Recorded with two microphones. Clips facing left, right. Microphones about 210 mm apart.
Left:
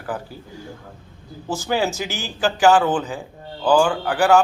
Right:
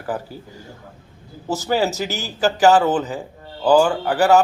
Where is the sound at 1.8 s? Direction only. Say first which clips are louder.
Right 2 dB; 40° right (ahead or behind).